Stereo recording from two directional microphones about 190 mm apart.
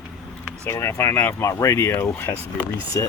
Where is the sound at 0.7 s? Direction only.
15° left (ahead or behind).